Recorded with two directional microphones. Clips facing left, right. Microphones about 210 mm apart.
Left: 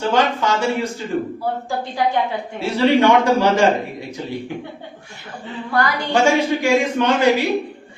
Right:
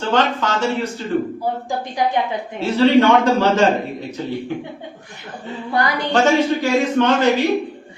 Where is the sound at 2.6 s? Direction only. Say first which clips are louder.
Right 2 dB; 10° left (ahead or behind).